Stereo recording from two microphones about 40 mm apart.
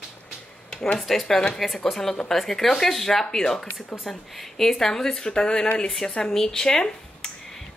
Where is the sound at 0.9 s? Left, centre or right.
Centre.